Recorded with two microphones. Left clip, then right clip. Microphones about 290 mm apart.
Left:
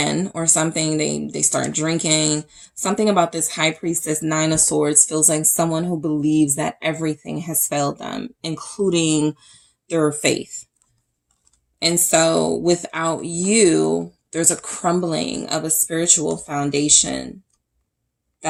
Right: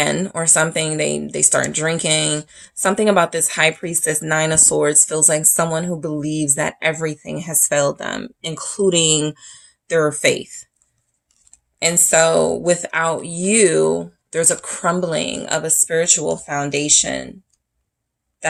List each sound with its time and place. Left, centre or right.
0.0 s speech: right
11.8 s speech: right